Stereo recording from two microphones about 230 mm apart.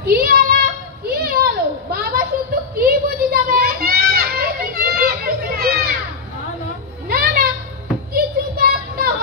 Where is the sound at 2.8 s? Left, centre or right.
Right.